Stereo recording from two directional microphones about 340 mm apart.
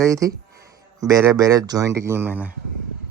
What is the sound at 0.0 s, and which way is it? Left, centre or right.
Speech, centre.